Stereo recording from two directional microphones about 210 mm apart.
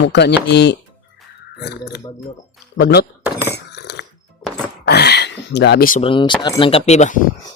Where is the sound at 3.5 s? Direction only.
55° left (ahead or behind).